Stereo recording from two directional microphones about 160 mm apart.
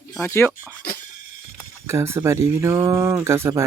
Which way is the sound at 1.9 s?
15° right (ahead or behind).